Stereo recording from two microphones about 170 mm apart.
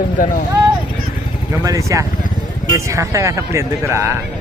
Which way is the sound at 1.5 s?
20° right (ahead or behind).